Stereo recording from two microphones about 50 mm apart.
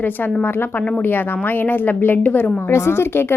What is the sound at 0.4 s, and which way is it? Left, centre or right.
Speech, left.